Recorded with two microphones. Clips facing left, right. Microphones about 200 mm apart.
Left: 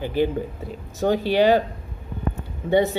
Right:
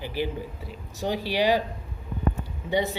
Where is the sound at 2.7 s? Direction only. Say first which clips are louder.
Left 7 dB; 55° left (ahead or behind).